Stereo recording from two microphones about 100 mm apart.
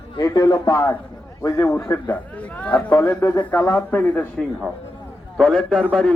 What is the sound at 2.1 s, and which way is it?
Speech, 15° left (ahead or behind).